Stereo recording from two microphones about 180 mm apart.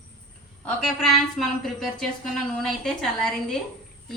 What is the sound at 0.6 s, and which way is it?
A woman's voice, centre (ahead or behind).